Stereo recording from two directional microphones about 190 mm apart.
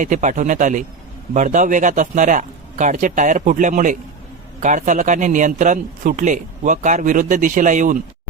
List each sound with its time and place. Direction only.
0.0 s a man's voice: 40° right (ahead or behind)